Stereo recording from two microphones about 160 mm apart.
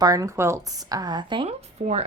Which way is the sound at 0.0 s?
20° right (ahead or behind).